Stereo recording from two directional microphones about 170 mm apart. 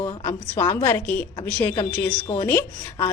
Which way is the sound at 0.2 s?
15° left (ahead or behind).